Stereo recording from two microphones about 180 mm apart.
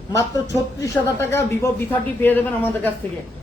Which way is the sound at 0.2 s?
15° left (ahead or behind).